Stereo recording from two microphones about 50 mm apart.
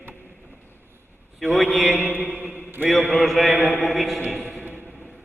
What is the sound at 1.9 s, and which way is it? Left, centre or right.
Mantra, right.